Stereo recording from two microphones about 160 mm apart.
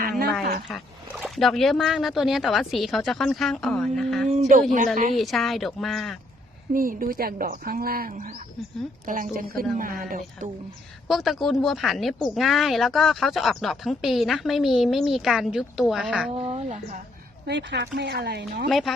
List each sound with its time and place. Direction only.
0.7 s speech: centre (ahead or behind)
4.3 s speech: 50° right (ahead or behind)
5.1 s speech: centre (ahead or behind)
6.7 s a woman's voice: 60° right (ahead or behind)
11.1 s speech: centre (ahead or behind)
16.3 s speech: 40° right (ahead or behind)
17.4 s speech: 90° right
18.7 s speech: centre (ahead or behind)